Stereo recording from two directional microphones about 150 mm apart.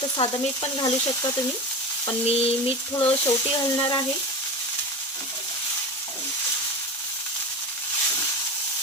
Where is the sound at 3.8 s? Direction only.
25° left (ahead or behind).